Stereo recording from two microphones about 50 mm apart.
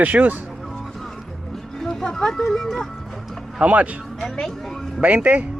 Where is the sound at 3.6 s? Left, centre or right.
Right.